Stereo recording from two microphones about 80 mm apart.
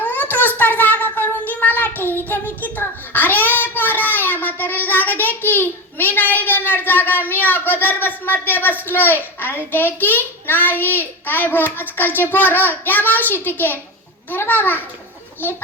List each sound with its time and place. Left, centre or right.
0.0 s a child's voice: left